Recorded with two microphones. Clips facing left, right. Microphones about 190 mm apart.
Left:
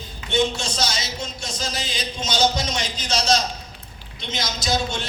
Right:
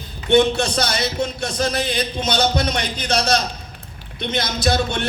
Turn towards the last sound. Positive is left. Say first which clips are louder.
# right 5 dB
turn(degrees=-60)  # may be behind; listen again after turning